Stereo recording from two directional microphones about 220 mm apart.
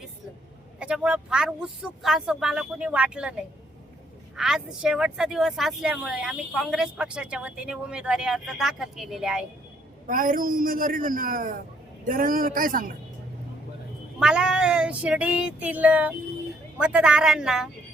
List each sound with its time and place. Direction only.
0.8 s speech: 5° right (ahead or behind)
4.4 s speech: centre (ahead or behind)
10.1 s a man's voice: 40° right (ahead or behind)
14.2 s child singing: 5° right (ahead or behind)
16.7 s speech: 5° right (ahead or behind)